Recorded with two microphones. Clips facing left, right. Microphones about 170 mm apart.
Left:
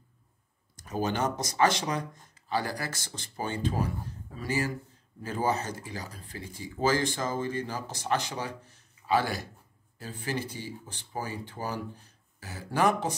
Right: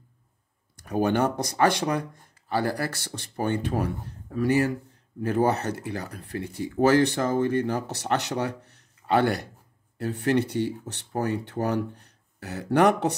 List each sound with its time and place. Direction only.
0.7 s speech: 60° right (ahead or behind)